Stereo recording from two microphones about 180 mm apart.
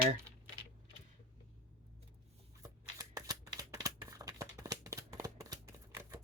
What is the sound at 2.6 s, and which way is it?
Shuffling cards, 20° right (ahead or behind).